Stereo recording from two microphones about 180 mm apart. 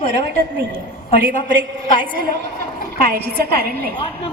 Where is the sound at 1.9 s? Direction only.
50° right (ahead or behind).